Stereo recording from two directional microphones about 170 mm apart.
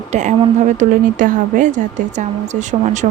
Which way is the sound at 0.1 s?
45° right (ahead or behind).